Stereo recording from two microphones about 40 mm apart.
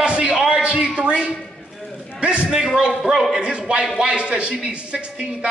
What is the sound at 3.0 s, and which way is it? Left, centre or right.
Speech, centre.